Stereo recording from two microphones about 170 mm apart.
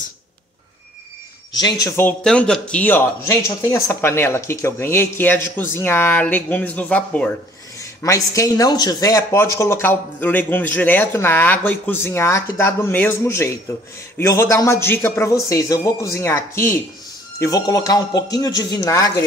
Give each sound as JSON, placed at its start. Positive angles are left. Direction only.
{"t": 1.6, "sound": "speech", "side_deg": 20}
{"t": 2.2, "sound": "speech", "side_deg": 5}
{"t": 7.8, "sound": "speech", "side_deg": 20}